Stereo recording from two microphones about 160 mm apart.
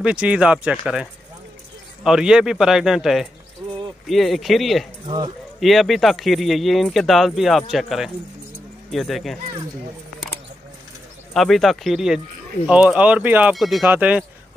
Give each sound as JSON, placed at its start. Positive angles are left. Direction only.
{"t": 0.0, "sound": "speech", "side_deg": -5}
{"t": 2.0, "sound": "speech", "side_deg": -5}
{"t": 5.0, "sound": "speech", "side_deg": -30}
{"t": 5.6, "sound": "speech", "side_deg": 0}
{"t": 11.3, "sound": "speech", "side_deg": 0}